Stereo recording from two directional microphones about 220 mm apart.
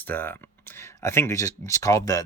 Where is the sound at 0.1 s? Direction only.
10° left (ahead or behind).